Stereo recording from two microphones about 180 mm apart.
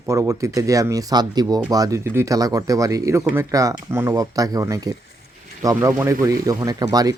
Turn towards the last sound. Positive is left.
turn(degrees=-20)  # may be behind; listen again after turning